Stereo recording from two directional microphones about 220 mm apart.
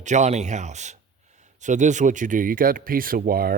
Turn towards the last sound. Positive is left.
turn(degrees=-40)  # may be behind; listen again after turning